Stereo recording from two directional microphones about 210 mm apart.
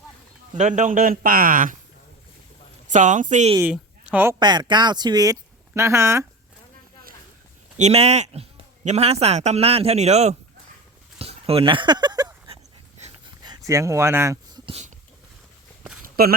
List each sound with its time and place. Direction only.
0.5 s a man's voice: 35° right (ahead or behind)
2.9 s a man's voice: 35° right (ahead or behind)
3.6 s speech: 5° right (ahead or behind)
4.4 s speech: 20° right (ahead or behind)
7.8 s a man's voice: 30° right (ahead or behind)
11.2 s a sound: 25° right (ahead or behind)
13.0 s dog: 35° right (ahead or behind)
13.7 s speech: 15° right (ahead or behind)
16.0 s a sound: 45° right (ahead or behind)